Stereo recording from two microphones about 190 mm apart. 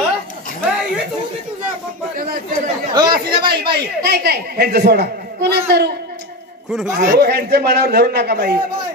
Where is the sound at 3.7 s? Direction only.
60° right (ahead or behind).